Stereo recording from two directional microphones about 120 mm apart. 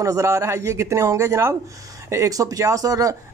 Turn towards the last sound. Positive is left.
turn(degrees=-30)  # may be behind; listen again after turning